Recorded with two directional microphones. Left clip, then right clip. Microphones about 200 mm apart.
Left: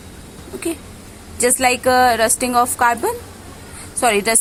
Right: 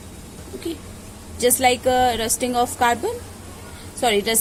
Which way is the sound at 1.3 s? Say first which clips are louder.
Left 2 dB; 15° left (ahead or behind).